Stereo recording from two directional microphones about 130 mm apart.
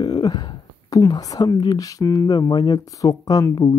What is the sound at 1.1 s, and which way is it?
Speech, 30° left (ahead or behind).